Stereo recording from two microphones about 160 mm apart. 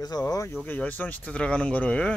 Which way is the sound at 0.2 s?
20° left (ahead or behind).